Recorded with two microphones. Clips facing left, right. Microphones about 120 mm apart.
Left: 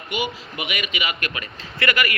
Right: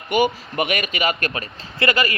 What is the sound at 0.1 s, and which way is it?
A man's voice, 50° right (ahead or behind).